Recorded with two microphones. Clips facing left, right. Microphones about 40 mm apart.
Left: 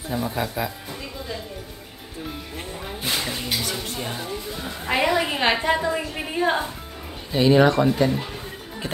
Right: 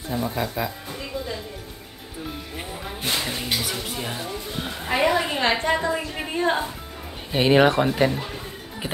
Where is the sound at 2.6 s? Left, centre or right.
Centre.